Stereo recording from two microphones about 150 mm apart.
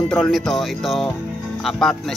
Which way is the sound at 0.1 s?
Centre (ahead or behind).